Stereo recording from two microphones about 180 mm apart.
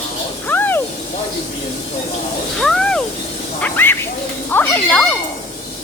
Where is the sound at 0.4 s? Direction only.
10° left (ahead or behind).